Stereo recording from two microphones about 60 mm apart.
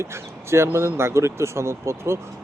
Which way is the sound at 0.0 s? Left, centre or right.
Right.